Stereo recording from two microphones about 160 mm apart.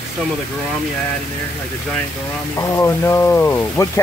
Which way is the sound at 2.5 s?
20° left (ahead or behind).